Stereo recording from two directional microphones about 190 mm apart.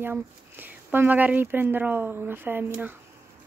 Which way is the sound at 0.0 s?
10° right (ahead or behind).